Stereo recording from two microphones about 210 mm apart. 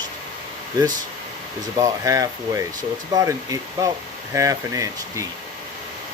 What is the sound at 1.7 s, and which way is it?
Speech, 15° right (ahead or behind).